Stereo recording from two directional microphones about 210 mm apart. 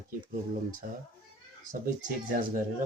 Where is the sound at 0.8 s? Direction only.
45° right (ahead or behind).